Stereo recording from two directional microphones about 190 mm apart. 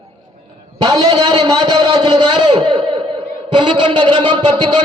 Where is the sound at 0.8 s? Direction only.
20° right (ahead or behind).